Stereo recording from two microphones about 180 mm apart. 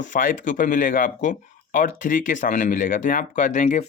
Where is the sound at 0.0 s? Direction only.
50° left (ahead or behind).